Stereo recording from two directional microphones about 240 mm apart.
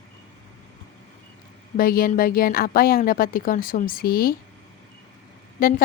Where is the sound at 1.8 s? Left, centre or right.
Left.